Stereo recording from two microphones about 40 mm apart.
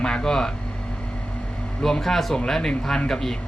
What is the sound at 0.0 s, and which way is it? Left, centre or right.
Speech, centre.